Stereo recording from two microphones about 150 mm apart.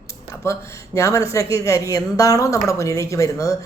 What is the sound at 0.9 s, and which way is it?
A woman's voice, 20° left (ahead or behind).